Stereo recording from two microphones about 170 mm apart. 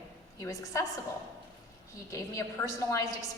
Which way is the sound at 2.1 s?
20° left (ahead or behind).